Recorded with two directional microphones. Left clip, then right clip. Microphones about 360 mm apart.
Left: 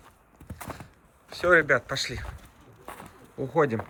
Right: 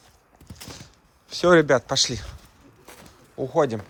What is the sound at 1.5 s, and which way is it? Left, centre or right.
Speech, centre.